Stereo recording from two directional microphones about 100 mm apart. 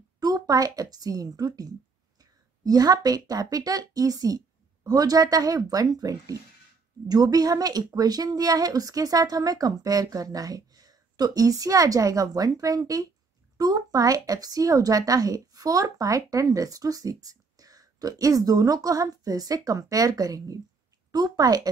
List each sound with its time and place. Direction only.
0.2 s a woman's voice: 35° right (ahead or behind)